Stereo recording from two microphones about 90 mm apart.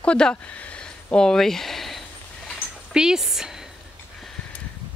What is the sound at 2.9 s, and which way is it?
Speech, 5° right (ahead or behind).